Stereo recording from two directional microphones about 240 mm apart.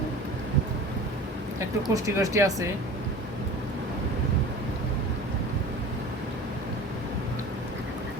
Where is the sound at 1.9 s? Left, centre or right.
Centre.